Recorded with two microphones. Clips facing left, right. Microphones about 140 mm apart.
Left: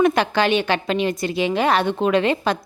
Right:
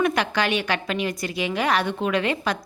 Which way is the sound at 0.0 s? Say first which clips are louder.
Left 5 dB; 30° left (ahead or behind).